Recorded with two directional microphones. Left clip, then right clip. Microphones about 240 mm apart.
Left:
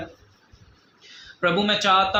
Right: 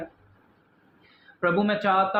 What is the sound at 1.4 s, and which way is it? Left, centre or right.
Speech, left.